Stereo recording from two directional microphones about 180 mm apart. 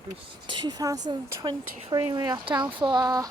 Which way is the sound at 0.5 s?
25° right (ahead or behind).